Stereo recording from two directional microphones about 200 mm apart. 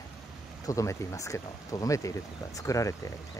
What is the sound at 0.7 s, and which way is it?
Speech, 15° left (ahead or behind).